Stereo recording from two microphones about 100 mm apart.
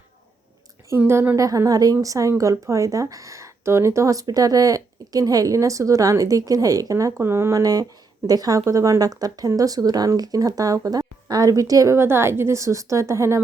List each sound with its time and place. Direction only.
0.9 s a woman's voice: 25° right (ahead or behind)
1.4 s a woman's voice: 35° right (ahead or behind)
7.6 s speech: 40° right (ahead or behind)